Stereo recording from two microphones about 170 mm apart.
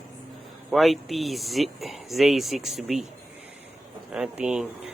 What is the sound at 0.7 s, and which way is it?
Speech, centre (ahead or behind).